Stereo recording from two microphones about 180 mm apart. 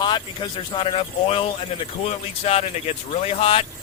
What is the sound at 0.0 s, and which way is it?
A man's voice, 25° left (ahead or behind).